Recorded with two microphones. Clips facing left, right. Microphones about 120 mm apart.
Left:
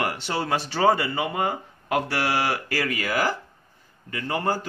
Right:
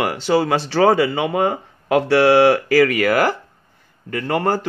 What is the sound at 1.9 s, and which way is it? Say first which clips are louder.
Speech: right 11 dB; 70° right (ahead or behind).